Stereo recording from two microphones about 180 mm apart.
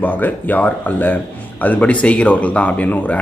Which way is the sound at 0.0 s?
10° left (ahead or behind).